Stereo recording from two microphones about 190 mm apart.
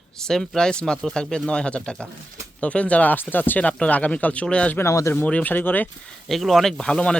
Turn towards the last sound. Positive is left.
turn(degrees=5)  # may be behind; listen again after turning